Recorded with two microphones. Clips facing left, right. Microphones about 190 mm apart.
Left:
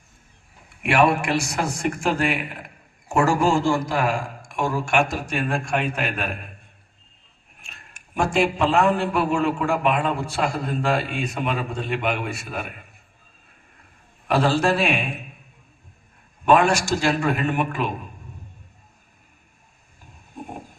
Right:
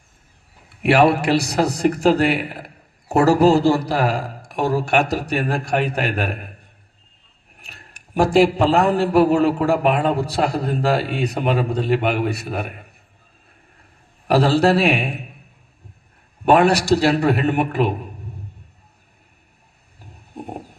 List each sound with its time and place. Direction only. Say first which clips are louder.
0.8 s a man's voice: right 4 dB; 35° right (ahead or behind)
7.6 s a man's voice: right 3 dB; 35° right (ahead or behind)
14.3 s a man's voice: right 4 dB; 35° right (ahead or behind)
16.9 s a man's voice: right 6 dB; 35° right (ahead or behind)